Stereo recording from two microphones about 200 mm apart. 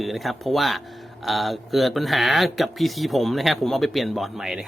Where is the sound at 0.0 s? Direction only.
Centre (ahead or behind).